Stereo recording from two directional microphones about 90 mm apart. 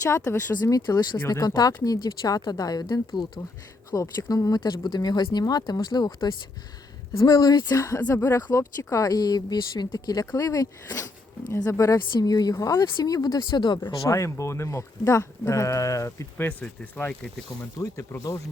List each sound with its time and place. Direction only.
0.0 s speech: 35° left (ahead or behind); by 6.1 s 50° left (ahead or behind)
7.2 s speech: 45° left (ahead or behind)
11.9 s speech: 50° left (ahead or behind)
14.1 s speech: 35° left (ahead or behind)
16.4 s speech: 20° left (ahead or behind)
17.8 s speech: 40° left (ahead or behind)